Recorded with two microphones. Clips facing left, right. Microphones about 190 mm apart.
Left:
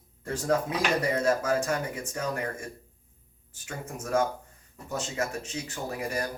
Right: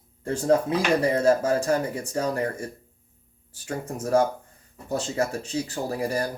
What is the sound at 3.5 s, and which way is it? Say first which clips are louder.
Speech: right 7 dB; 35° right (ahead or behind).